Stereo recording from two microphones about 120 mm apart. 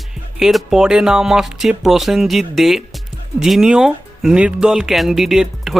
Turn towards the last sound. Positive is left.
turn(degrees=-5)  # may be behind; listen again after turning